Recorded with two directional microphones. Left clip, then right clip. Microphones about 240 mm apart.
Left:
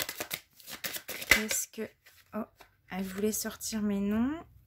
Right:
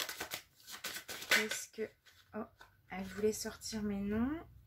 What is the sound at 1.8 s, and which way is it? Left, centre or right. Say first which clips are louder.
Speech: left 2 dB; left.